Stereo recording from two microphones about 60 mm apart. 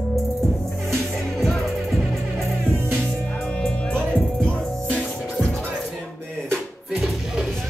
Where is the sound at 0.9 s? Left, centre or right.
Centre.